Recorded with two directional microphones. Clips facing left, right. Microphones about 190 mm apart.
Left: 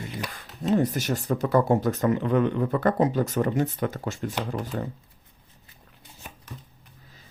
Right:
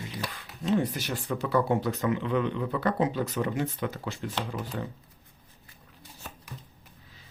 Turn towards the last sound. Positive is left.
turn(degrees=10)  # may be behind; listen again after turning